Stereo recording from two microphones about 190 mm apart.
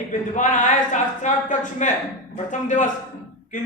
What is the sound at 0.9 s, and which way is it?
A man's voice, 40° left (ahead or behind).